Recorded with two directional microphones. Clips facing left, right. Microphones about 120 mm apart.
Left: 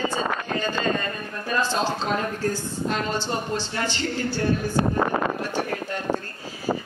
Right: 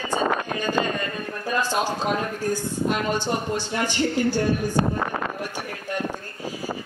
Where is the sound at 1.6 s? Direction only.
15° right (ahead or behind).